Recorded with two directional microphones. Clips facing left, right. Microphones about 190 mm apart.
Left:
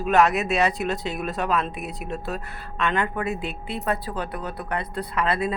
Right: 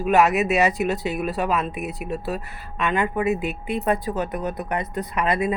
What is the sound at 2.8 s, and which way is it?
Speech, 10° right (ahead or behind).